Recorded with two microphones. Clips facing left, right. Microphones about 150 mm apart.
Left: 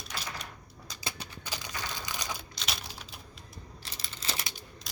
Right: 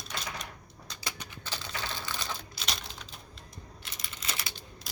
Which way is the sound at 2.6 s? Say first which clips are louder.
Even; 5° left (ahead or behind).